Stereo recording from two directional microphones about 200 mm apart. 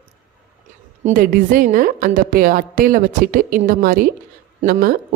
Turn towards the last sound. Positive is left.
turn(degrees=-45)  # may be behind; listen again after turning